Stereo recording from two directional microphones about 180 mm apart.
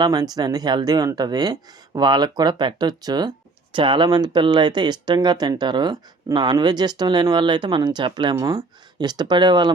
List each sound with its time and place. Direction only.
0.0 s speech: 20° right (ahead or behind)